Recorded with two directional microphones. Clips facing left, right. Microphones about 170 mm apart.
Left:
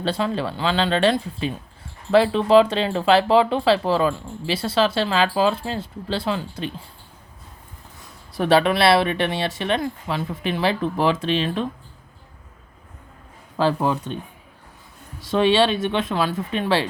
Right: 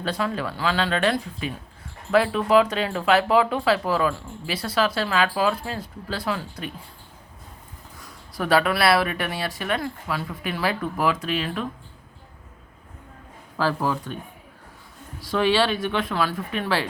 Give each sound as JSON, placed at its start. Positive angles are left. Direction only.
{"t": 0.0, "sound": "speech", "side_deg": 30}
{"t": 8.3, "sound": "speech", "side_deg": 25}
{"t": 13.6, "sound": "speech", "side_deg": 25}
{"t": 15.2, "sound": "speech", "side_deg": 25}